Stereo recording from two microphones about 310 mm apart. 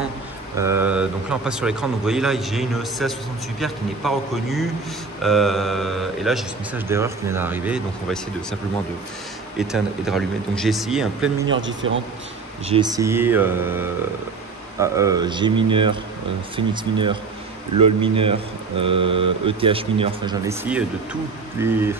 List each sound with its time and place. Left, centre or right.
0.6 s a man's voice: centre
9.6 s a man's voice: centre
11.4 s a man's voice: right
12.6 s speech: centre